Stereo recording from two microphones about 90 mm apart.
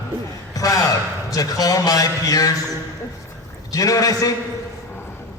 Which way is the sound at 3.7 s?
40° left (ahead or behind).